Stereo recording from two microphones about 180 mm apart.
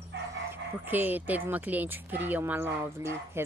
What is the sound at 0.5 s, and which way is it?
Speech, 10° right (ahead or behind).